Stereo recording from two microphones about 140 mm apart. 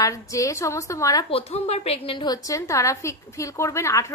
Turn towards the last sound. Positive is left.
turn(degrees=20)  # may be behind; listen again after turning